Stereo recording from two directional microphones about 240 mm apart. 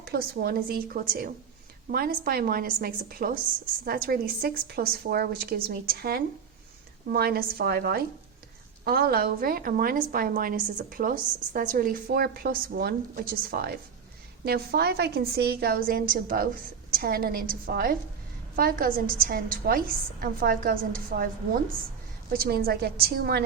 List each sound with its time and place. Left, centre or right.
0.0 s a woman's voice: right
22.3 s a woman's voice: right